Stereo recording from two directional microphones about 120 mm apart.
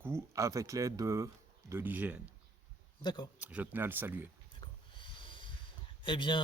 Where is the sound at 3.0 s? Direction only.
35° left (ahead or behind).